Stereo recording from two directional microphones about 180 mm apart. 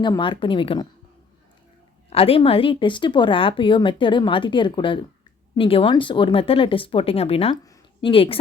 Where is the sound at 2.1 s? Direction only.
35° left (ahead or behind).